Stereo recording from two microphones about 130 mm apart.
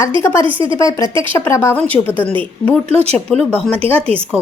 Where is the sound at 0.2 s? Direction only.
20° left (ahead or behind).